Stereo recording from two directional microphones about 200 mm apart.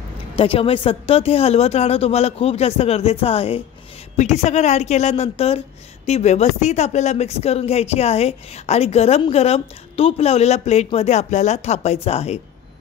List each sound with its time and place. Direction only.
0.4 s speech: 30° left (ahead or behind)